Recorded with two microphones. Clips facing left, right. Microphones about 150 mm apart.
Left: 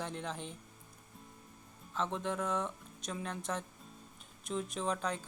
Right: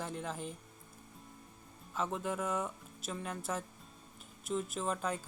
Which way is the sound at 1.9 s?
5° right (ahead or behind).